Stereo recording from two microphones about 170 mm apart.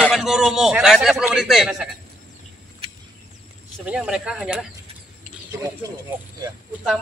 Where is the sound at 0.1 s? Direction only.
5° right (ahead or behind).